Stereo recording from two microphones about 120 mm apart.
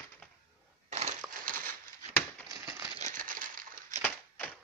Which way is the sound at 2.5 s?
30° right (ahead or behind).